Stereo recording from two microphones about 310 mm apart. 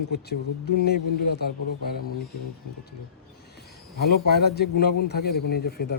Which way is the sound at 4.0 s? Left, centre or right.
Left.